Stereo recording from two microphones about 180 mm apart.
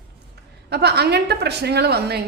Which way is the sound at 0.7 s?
65° right (ahead or behind).